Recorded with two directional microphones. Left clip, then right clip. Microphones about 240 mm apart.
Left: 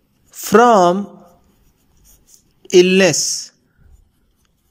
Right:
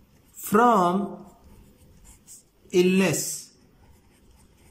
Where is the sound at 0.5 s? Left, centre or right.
Left.